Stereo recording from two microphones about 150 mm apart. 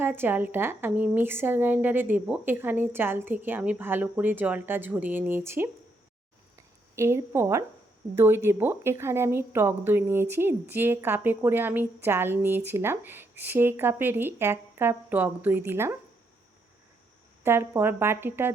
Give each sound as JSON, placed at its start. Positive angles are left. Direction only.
{"t": 0.0, "sound": "speech", "side_deg": -15}
{"t": 17.4, "sound": "speech", "side_deg": -15}